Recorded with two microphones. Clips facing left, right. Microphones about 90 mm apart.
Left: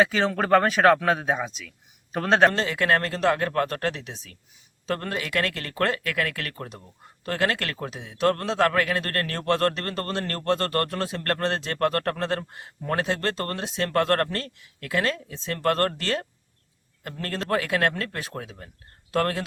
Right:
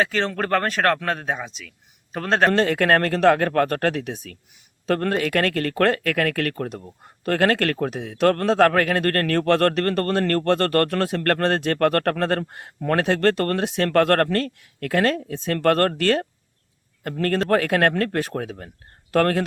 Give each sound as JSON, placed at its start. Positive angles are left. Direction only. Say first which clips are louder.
{"t": 0.0, "sound": "speech", "louder": "left 1 dB", "side_deg": 5}
{"t": 2.5, "sound": "speech", "louder": "right 5 dB", "side_deg": -55}